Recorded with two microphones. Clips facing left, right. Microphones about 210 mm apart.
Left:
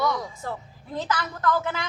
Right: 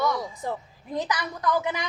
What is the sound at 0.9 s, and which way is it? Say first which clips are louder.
Speech: even; 15° right (ahead or behind).